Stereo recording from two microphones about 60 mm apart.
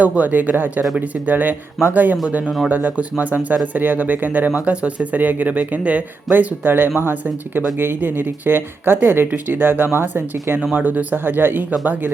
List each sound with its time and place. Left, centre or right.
0.0 s speech: right
2.4 s speech: centre
2.6 s speech: right
6.3 s speech: right